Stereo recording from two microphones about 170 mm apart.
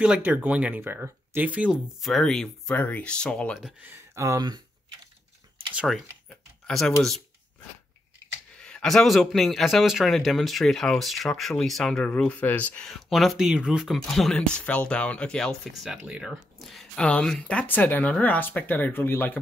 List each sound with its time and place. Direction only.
0.0 s a man's voice: 10° right (ahead or behind)
3.6 s speech: 10° right (ahead or behind)
5.8 s a man's voice: centre (ahead or behind)
8.6 s a man's voice: 5° left (ahead or behind)